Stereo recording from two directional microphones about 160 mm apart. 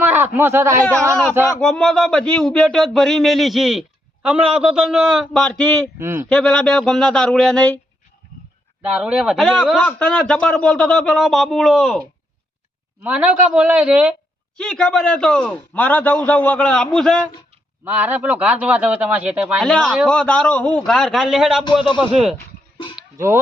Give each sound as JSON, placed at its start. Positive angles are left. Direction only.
{"t": 0.0, "sound": "speech", "side_deg": -10}
{"t": 1.6, "sound": "speech", "side_deg": 5}
{"t": 6.0, "sound": "a man's voice", "side_deg": -15}
{"t": 6.2, "sound": "speech", "side_deg": 5}
{"t": 8.8, "sound": "a man's voice", "side_deg": -5}
{"t": 14.6, "sound": "a man's voice", "side_deg": 5}
{"t": 17.8, "sound": "a man's voice", "side_deg": -10}
{"t": 19.6, "sound": "speech", "side_deg": 5}
{"t": 23.1, "sound": "speech", "side_deg": -15}